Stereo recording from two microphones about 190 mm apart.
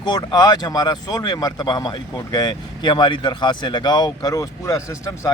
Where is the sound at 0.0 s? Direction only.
25° left (ahead or behind).